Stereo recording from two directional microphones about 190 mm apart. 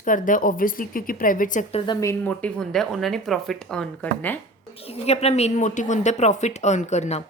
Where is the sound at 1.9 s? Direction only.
15° left (ahead or behind).